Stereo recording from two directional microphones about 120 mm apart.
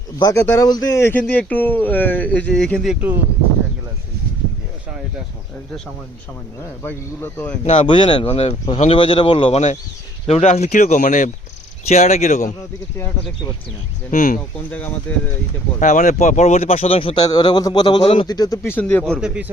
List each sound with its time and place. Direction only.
0.2 s a man's voice: 30° left (ahead or behind); by 2.9 s 5° left (ahead or behind)
2.9 s speech: 15° right (ahead or behind)
6.8 s speech: 15° left (ahead or behind)
7.6 s speech: 55° left (ahead or behind)
8.9 s speech: 45° left (ahead or behind)
10.2 s speech: 60° left (ahead or behind); by 11.3 s 90° left
11.9 s speech: 70° left (ahead or behind); by 12.5 s 85° left
14.1 s speech: 90° left
15.1 s speech: 15° left (ahead or behind)
15.8 s speech: 90° left; by 17.2 s 50° left (ahead or behind)
17.2 s a man's voice: 35° left (ahead or behind)
18.3 s speech: 30° left (ahead or behind); by 19.2 s 10° left (ahead or behind)
19.2 s speech: 10° right (ahead or behind)